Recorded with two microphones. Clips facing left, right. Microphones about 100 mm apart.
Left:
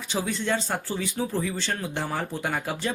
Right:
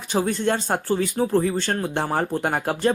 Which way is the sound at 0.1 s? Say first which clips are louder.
Right 5 dB; 50° right (ahead or behind).